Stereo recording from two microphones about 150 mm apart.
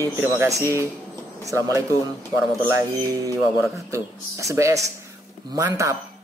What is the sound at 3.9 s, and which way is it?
Speech, 20° right (ahead or behind).